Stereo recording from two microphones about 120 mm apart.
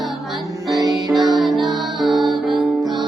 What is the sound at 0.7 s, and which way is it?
Music, 30° right (ahead or behind).